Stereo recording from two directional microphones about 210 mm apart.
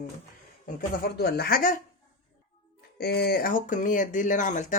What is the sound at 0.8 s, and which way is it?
Speech, 50° left (ahead or behind).